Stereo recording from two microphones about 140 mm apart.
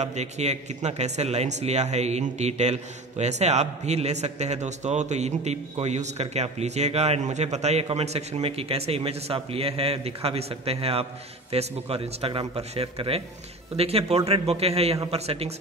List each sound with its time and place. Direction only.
0.0 s a man's voice: 55° right (ahead or behind)